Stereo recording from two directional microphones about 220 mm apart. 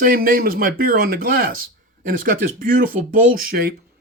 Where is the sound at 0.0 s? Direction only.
40° right (ahead or behind).